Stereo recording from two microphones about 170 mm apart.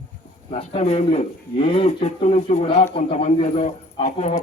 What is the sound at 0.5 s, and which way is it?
Speech, 40° left (ahead or behind).